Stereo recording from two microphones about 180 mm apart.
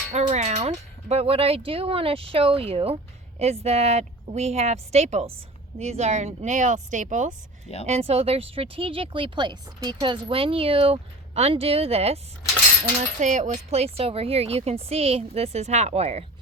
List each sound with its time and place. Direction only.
0.1 s speech: 40° right (ahead or behind)